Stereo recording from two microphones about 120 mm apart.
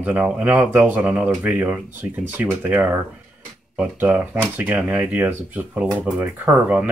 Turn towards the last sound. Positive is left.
turn(degrees=-10)  # may be behind; listen again after turning